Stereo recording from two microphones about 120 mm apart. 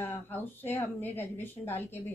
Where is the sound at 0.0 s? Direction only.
15° left (ahead or behind).